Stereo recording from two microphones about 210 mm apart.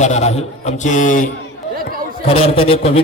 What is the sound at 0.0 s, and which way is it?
A man's voice, 30° left (ahead or behind).